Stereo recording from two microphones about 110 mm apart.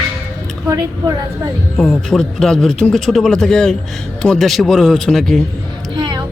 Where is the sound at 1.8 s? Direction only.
5° left (ahead or behind).